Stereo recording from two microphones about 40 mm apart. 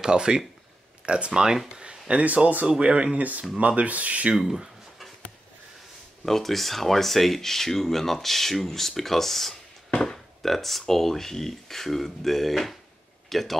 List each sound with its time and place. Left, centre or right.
0.0 s speech: centre
1.7 s a sound: right
2.2 s speech: right
3.2 s speech: right
4.3 s a sound: centre
6.2 s speech: centre